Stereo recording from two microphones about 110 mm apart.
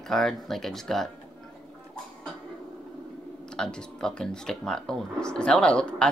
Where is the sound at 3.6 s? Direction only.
5° left (ahead or behind).